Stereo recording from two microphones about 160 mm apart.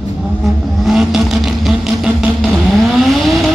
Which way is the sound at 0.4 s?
Centre (ahead or behind).